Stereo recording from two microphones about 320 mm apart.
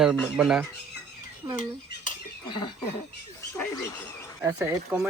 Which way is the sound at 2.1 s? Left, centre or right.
Centre.